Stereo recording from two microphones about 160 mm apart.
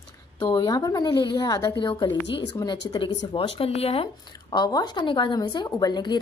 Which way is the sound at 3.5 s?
40° left (ahead or behind).